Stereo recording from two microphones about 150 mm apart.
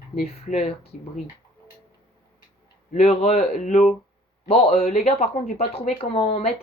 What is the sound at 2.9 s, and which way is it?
Speech, 40° left (ahead or behind).